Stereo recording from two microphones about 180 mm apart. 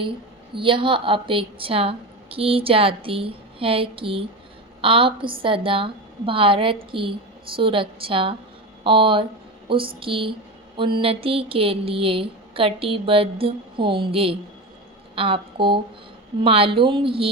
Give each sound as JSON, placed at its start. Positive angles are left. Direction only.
{"t": 0.5, "sound": "a woman's voice", "side_deg": -30}
{"t": 9.6, "sound": "a sound", "side_deg": -30}
{"t": 10.0, "sound": "a woman's voice", "side_deg": -30}